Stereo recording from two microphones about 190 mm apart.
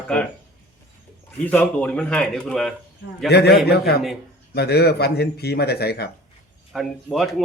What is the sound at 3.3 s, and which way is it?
Speech, 60° left (ahead or behind).